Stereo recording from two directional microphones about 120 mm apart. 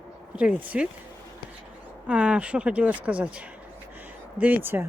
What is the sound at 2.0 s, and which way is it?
Speech, 10° right (ahead or behind).